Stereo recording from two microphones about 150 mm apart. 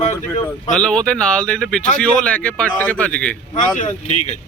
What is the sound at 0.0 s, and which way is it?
Speech, 45° left (ahead or behind).